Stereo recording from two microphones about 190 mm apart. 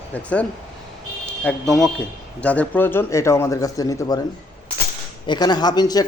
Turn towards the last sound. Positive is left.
turn(degrees=20)  # may be behind; listen again after turning